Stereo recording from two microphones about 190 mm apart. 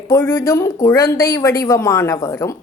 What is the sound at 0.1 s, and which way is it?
Speech, 15° left (ahead or behind).